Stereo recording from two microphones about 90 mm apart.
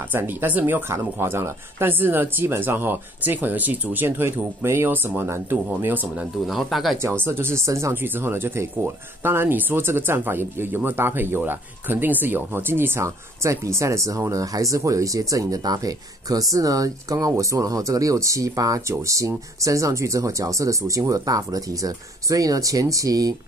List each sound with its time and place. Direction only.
0.1 s speech: 20° right (ahead or behind)
6.4 s speech: centre (ahead or behind)
7.0 s speech: 25° right (ahead or behind); by 23.3 s 40° right (ahead or behind)